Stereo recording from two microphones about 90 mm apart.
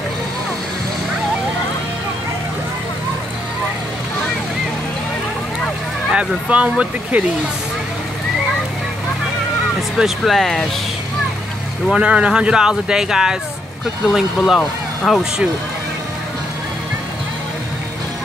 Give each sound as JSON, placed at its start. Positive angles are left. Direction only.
{"t": 6.1, "sound": "speech", "side_deg": -15}
{"t": 9.8, "sound": "speech", "side_deg": 0}
{"t": 11.9, "sound": "speech", "side_deg": -10}